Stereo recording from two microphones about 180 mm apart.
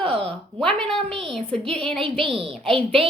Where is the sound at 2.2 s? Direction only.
30° right (ahead or behind).